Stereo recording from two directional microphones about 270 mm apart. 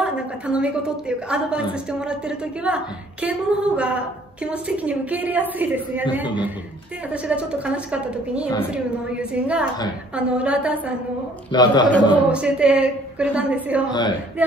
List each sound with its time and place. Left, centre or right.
0.0 s a woman's voice: centre
7.1 s a woman's voice: centre
11.5 s a man's voice: centre
12.3 s a woman's voice: centre